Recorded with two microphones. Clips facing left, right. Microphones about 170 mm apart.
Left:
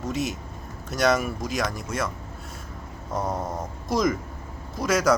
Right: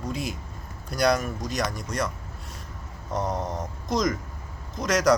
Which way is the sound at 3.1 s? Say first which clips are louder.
Even; 5° left (ahead or behind).